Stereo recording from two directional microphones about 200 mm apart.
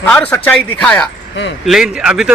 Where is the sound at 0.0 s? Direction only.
5° left (ahead or behind).